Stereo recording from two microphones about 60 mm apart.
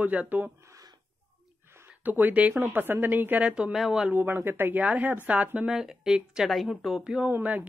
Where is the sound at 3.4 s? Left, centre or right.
Centre.